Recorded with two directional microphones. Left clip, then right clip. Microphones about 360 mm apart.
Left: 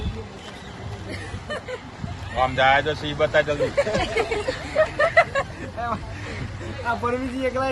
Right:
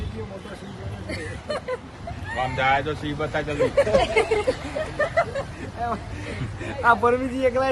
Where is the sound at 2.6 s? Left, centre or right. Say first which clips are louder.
Left 3 dB; centre.